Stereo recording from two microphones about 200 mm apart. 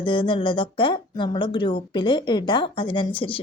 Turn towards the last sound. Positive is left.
turn(degrees=25)  # may be behind; listen again after turning